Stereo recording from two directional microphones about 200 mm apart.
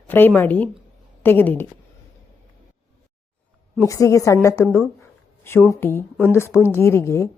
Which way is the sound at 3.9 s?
15° left (ahead or behind).